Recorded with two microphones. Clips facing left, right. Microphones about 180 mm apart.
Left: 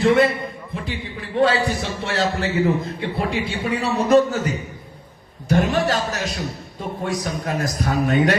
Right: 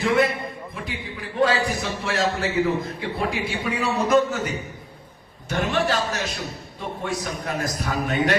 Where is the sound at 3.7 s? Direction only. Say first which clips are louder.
Left 4 dB; 30° left (ahead or behind).